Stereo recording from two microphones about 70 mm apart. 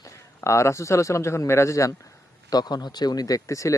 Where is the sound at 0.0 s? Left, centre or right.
Left.